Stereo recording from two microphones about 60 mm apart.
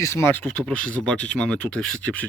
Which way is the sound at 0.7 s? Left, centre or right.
Centre.